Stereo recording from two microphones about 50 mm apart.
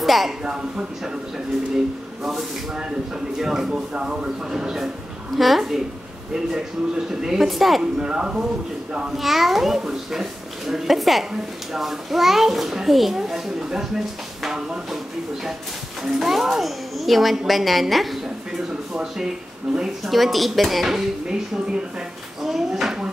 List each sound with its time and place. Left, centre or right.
0.0 s a sound: centre
0.4 s speech: right
2.2 s speech: centre
3.9 s speech: right
5.3 s a child's voice: centre
7.2 s a child's voice: centre
7.8 s speech: centre
9.1 s a child's voice: centre
16.0 s a child's voice: centre
19.7 s a child's voice: centre